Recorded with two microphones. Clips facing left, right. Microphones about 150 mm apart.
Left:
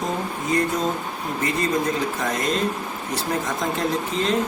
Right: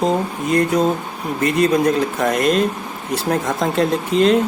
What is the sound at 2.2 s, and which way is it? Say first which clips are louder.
Speech: right 7 dB; 65° right (ahead or behind).